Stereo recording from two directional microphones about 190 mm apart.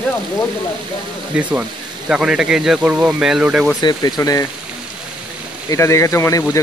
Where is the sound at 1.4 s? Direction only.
5° right (ahead or behind).